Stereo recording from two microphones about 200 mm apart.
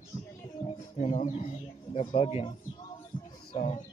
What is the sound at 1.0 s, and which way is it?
Speech, 35° left (ahead or behind).